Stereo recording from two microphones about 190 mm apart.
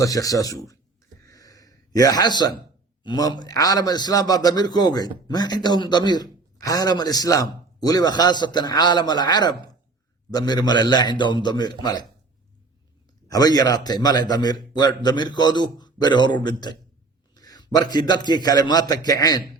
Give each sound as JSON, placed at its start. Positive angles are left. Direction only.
{"t": 0.0, "sound": "speech", "side_deg": 20}
{"t": 1.3, "sound": "a sound", "side_deg": 20}
{"t": 3.0, "sound": "a man's voice", "side_deg": 20}
{"t": 13.2, "sound": "a man's voice", "side_deg": 20}